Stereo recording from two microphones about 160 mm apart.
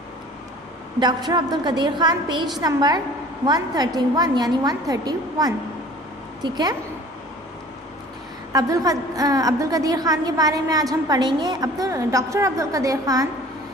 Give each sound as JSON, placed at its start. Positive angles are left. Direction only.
{"t": 0.9, "sound": "a woman's voice", "side_deg": -25}
{"t": 8.5, "sound": "a woman's voice", "side_deg": -20}